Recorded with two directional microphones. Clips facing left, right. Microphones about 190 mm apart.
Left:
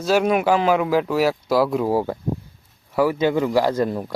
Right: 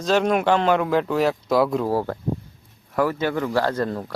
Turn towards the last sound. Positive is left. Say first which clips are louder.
# left 3 dB
turn(degrees=15)  # may be behind; listen again after turning